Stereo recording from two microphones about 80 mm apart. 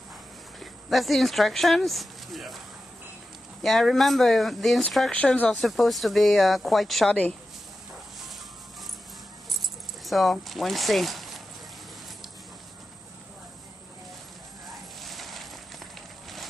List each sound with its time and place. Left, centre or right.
0.6 s speech: centre
3.6 s speech: centre
5.1 s speech: centre
5.5 s speech: centre
7.1 s speech: centre
10.0 s speech: centre
14.7 s a sound: centre